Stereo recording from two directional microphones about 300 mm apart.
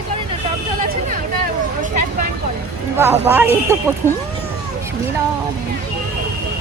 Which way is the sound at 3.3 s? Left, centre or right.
Centre.